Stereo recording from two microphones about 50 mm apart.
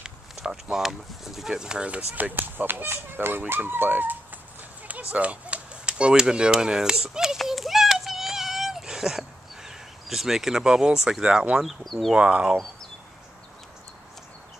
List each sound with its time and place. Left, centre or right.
0.0 s speech: centre
1.5 s speech: centre
1.9 s speech: right
2.3 s speech: right
5.1 s speech: right; by 7.3 s centre
7.3 s a sound: centre
11.6 s speech: centre
12.1 s speech: right